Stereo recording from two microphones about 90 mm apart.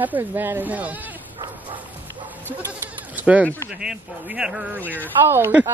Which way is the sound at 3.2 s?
15° right (ahead or behind).